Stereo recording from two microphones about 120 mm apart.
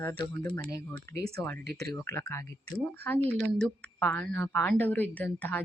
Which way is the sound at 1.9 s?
25° left (ahead or behind).